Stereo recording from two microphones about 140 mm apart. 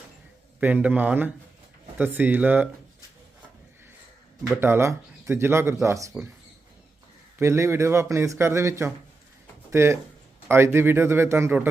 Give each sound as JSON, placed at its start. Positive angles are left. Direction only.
{"t": 0.6, "sound": "a man's voice", "side_deg": -10}
{"t": 4.5, "sound": "speech", "side_deg": -15}
{"t": 7.3, "sound": "a man's voice", "side_deg": -20}